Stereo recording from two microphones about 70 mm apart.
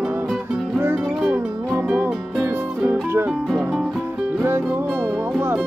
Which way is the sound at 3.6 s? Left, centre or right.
Centre.